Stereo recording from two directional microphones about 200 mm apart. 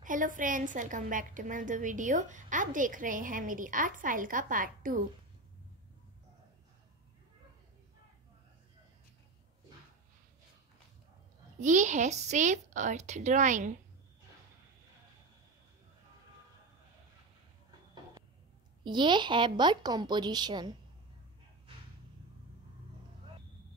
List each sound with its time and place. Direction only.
0.0 s a woman's voice: 40° right (ahead or behind)
11.6 s a woman's voice: 40° right (ahead or behind)
18.9 s speech: 25° right (ahead or behind)